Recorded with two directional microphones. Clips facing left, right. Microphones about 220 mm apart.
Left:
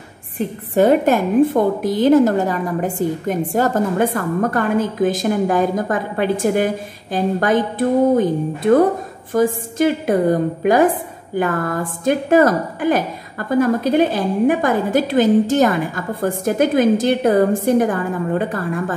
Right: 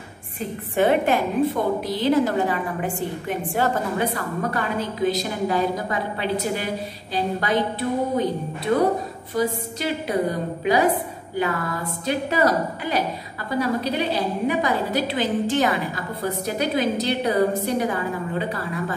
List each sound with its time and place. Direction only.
0.7 s a woman's voice: 40° left (ahead or behind)